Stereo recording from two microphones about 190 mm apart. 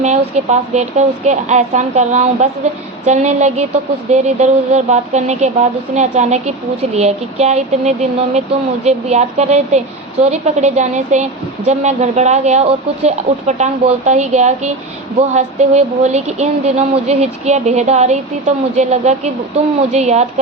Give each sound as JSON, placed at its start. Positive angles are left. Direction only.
{"t": 0.0, "sound": "speech", "side_deg": -35}